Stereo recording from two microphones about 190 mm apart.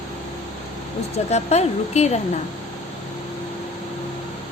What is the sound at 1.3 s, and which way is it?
Speech, 35° left (ahead or behind).